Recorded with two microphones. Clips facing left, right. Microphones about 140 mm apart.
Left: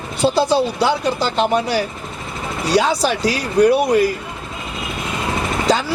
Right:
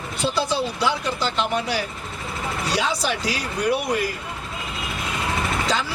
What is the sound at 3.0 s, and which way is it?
Speech, 40° left (ahead or behind).